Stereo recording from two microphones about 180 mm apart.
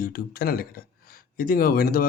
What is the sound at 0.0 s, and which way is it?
Speech, 55° left (ahead or behind).